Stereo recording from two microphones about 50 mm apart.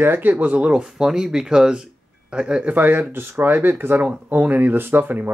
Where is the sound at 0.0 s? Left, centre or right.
Right.